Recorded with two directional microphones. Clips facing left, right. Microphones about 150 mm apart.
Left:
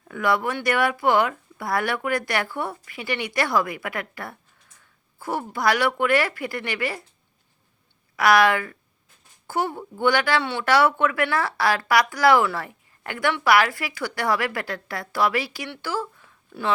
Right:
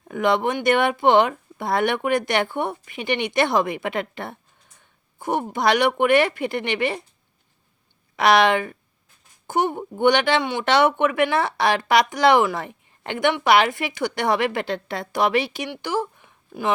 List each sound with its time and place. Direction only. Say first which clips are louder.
0.1 s speech: right 3 dB; 20° right (ahead or behind)
8.1 s speech: right 1 dB; 25° right (ahead or behind)